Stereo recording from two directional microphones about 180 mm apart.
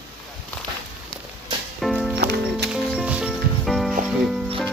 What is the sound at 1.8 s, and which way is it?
Music, centre (ahead or behind).